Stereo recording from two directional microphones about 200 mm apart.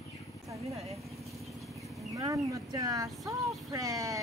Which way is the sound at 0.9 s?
Centre (ahead or behind).